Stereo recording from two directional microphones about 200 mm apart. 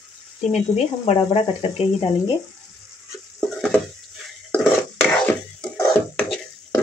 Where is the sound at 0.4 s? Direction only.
35° left (ahead or behind).